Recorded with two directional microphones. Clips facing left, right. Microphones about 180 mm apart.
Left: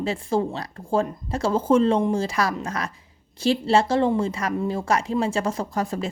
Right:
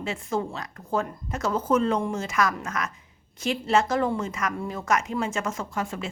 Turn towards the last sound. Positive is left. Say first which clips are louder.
# left 5 dB
turn(degrees=40)  # may be behind; listen again after turning